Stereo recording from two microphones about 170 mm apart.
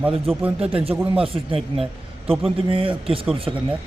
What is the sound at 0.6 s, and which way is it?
Speech, 35° right (ahead or behind).